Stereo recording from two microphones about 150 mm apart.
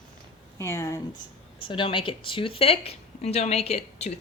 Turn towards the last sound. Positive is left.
turn(degrees=45)  # may be behind; listen again after turning